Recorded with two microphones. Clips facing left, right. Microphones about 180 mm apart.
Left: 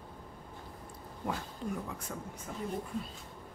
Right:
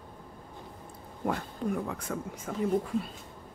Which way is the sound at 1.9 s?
85° right.